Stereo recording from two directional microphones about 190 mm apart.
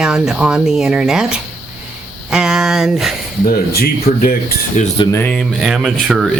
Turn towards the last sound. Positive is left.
turn(degrees=0)  # may be behind; listen again after turning